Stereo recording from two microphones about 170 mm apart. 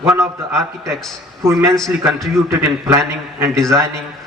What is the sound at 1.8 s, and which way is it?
Speech, centre (ahead or behind).